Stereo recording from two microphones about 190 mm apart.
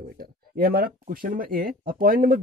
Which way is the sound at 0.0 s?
50° right (ahead or behind).